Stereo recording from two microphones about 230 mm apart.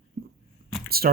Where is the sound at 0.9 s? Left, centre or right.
Right.